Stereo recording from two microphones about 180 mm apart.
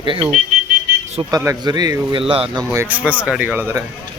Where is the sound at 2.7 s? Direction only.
10° right (ahead or behind).